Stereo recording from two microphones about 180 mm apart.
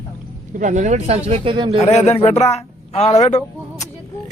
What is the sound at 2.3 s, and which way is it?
A woman's voice, 35° left (ahead or behind).